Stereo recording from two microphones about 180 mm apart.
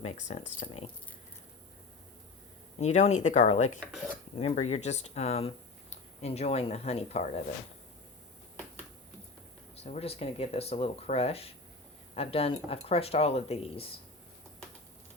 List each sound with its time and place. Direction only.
0.0 s speech: 40° left (ahead or behind)
2.7 s speech: 40° left (ahead or behind)
3.9 s speech: centre (ahead or behind)
4.4 s speech: 35° left (ahead or behind)
9.7 s speech: 35° left (ahead or behind)